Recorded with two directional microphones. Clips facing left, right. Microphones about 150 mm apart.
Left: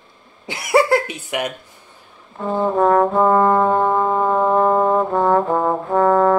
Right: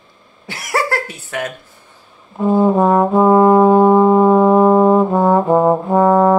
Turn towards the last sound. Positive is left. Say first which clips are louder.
# right 3 dB
turn(degrees=-15)  # may be behind; listen again after turning